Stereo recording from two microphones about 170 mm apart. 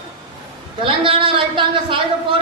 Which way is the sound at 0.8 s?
30° right (ahead or behind).